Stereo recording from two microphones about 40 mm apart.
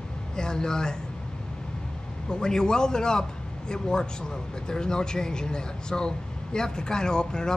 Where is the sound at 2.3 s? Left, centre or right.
Centre.